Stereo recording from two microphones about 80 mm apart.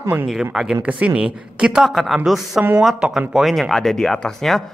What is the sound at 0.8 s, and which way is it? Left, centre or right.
A man's voice, centre.